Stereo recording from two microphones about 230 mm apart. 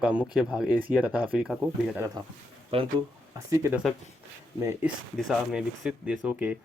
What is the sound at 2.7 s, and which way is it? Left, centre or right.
Speech, right.